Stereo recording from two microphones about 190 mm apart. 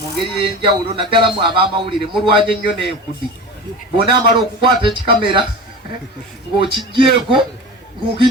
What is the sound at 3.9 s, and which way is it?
Speech, 25° right (ahead or behind).